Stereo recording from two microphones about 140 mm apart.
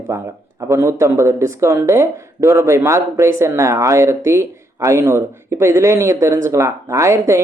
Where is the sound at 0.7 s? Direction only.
20° right (ahead or behind).